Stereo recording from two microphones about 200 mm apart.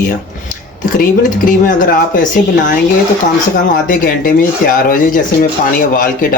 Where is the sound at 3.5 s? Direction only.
45° left (ahead or behind).